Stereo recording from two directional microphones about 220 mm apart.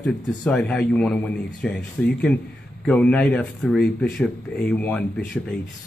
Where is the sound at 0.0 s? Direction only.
5° left (ahead or behind).